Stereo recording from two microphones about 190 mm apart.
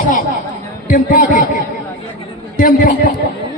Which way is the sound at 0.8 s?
45° left (ahead or behind).